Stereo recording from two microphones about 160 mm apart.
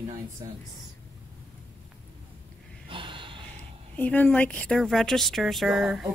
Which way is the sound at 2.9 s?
30° right (ahead or behind).